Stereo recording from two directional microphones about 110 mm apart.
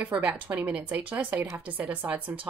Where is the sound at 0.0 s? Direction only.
10° right (ahead or behind).